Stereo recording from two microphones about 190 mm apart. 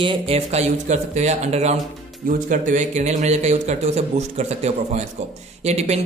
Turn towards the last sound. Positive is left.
turn(degrees=-35)  # may be behind; listen again after turning